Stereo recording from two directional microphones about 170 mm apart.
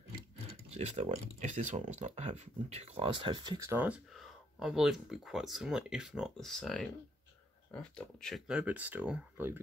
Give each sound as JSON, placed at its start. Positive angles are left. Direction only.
{"t": 0.7, "sound": "speech", "side_deg": -40}
{"t": 3.7, "sound": "speech", "side_deg": -10}